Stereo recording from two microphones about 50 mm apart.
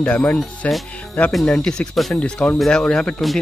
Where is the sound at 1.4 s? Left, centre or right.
Centre.